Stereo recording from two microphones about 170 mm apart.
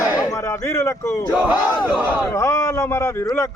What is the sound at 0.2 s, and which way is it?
Speech, 20° left (ahead or behind).